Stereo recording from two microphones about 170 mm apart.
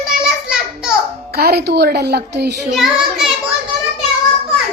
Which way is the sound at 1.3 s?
65° right (ahead or behind).